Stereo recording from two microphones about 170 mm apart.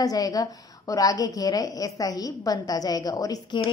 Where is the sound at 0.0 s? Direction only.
20° left (ahead or behind).